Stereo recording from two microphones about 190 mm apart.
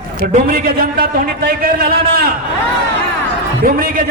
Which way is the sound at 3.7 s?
50° right (ahead or behind).